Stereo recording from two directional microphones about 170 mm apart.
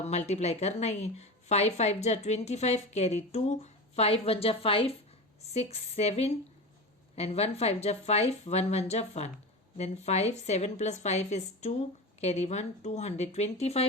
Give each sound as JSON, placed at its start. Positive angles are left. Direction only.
{"t": 0.0, "sound": "a woman's voice", "side_deg": 40}